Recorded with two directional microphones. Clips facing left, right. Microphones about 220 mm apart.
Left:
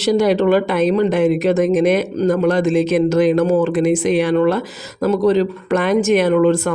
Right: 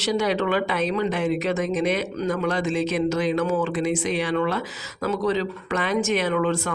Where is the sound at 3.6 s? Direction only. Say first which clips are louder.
Left 8 dB; 55° left (ahead or behind).